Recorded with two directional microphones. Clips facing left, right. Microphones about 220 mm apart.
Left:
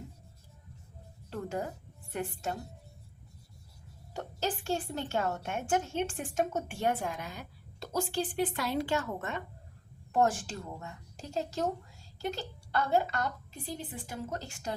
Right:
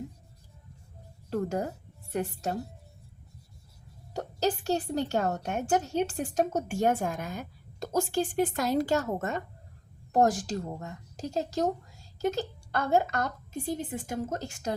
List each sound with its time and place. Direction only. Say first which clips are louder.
1.3 s a woman's voice: right 6 dB; 40° right (ahead or behind)
4.1 s a woman's voice: right 6 dB; 40° right (ahead or behind)